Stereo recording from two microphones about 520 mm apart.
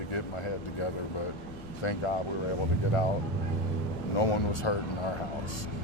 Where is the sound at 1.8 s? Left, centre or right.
Left.